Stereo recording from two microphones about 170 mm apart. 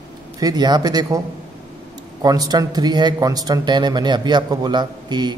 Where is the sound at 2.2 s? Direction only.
20° right (ahead or behind).